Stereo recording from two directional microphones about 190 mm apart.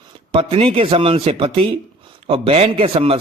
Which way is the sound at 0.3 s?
30° right (ahead or behind).